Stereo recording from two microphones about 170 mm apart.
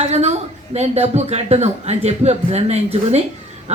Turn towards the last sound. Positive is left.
turn(degrees=-40)  # may be behind; listen again after turning